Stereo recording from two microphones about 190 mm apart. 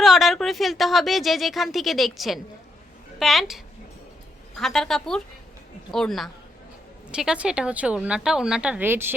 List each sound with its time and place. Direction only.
0.0 s a woman's voice: centre (ahead or behind)